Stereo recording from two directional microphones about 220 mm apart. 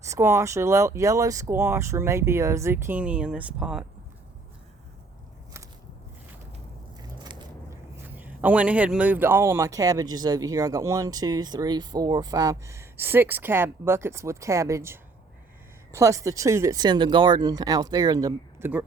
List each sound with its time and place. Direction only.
0.0 s a man's voice: 10° right (ahead or behind)
8.0 s a man's voice: 10° right (ahead or behind)